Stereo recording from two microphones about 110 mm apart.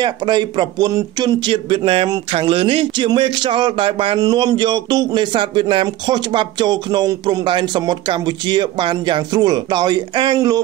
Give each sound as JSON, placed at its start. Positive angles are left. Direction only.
{"t": 0.0, "sound": "speech", "side_deg": -45}
{"t": 4.2, "sound": "speech", "side_deg": -40}